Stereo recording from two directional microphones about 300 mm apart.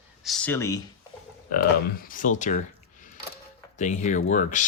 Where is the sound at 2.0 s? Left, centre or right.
Left.